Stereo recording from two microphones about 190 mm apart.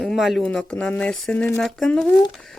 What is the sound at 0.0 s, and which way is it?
Speech, centre (ahead or behind).